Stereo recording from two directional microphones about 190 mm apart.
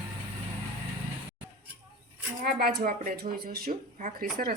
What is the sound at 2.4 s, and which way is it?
Speech, 55° right (ahead or behind).